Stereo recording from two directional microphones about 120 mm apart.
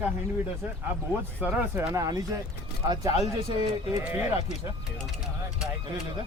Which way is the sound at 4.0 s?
15° right (ahead or behind).